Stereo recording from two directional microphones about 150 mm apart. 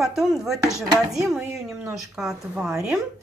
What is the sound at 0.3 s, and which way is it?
Speech, centre (ahead or behind).